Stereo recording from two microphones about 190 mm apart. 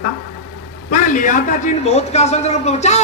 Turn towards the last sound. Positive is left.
turn(degrees=35)  # may be behind; listen again after turning